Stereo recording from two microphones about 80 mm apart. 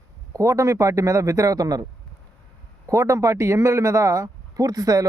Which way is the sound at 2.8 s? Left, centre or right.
Right.